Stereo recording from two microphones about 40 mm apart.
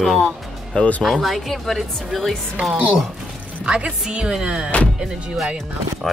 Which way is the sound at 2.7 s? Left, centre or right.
Centre.